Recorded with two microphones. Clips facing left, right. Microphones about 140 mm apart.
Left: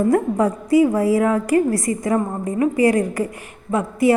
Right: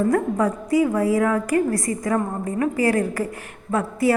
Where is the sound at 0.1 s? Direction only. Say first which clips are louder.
Left 3 dB; 25° left (ahead or behind).